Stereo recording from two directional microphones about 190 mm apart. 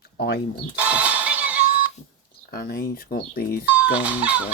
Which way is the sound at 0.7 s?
5° right (ahead or behind).